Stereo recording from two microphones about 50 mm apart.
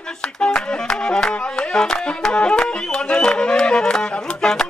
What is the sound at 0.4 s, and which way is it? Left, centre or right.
Music, centre.